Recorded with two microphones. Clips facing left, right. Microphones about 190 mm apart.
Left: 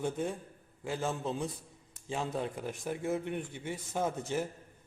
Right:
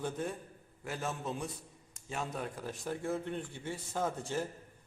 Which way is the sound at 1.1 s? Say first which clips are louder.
Left 2 dB; 30° left (ahead or behind).